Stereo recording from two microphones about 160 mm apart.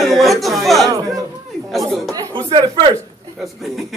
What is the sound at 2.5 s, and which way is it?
Speech, 30° right (ahead or behind).